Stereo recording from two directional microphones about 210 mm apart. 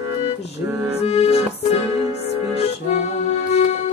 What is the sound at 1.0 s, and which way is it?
Accordion, 30° left (ahead or behind).